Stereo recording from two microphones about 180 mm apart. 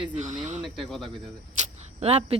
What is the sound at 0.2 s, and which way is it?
Speech, 40° right (ahead or behind).